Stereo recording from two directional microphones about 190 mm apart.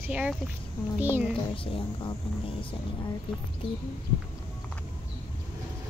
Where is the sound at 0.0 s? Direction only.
5° right (ahead or behind).